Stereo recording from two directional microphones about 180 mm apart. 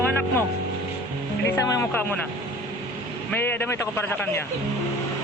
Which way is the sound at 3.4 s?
10° left (ahead or behind).